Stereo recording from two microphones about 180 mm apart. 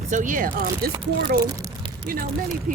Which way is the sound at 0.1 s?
45° right (ahead or behind).